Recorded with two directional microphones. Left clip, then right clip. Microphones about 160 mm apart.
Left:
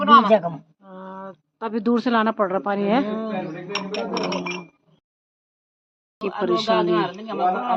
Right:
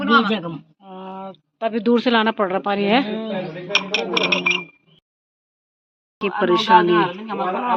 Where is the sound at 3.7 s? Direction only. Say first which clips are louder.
Right 8 dB; 25° right (ahead or behind).